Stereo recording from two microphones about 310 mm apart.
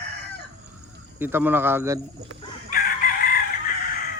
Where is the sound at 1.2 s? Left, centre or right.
Centre.